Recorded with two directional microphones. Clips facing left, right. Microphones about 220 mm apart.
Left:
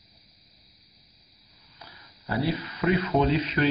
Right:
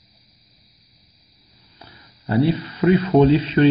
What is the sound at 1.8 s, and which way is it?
Speech, 30° right (ahead or behind).